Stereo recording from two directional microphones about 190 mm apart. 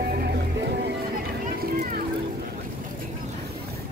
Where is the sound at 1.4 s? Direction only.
50° right (ahead or behind).